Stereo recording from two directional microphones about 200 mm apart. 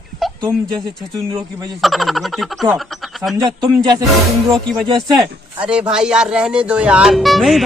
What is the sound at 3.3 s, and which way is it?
Speech, 20° right (ahead or behind).